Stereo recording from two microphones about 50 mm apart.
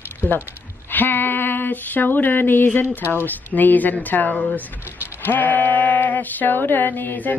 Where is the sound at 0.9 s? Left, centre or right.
Left.